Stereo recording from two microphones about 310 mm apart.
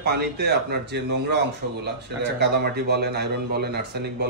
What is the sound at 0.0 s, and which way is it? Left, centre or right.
Speech, right.